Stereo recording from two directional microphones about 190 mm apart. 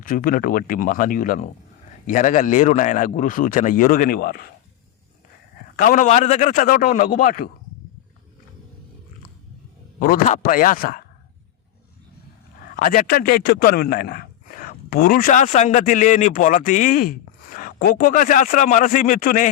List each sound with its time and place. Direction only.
0.0 s a man's voice: 45° left (ahead or behind)
5.7 s a man's voice: 45° left (ahead or behind)
10.0 s a man's voice: 45° left (ahead or behind)
12.7 s a man's voice: 45° left (ahead or behind)